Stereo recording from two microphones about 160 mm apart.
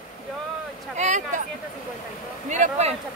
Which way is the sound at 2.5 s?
45° right (ahead or behind).